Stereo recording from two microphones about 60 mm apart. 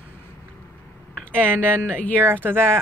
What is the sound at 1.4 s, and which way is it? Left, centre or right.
Speech, left.